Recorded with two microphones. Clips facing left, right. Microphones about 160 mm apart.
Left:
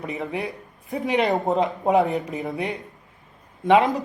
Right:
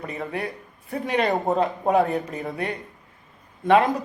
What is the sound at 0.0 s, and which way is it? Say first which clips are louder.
Speech: left 1 dB; 20° left (ahead or behind).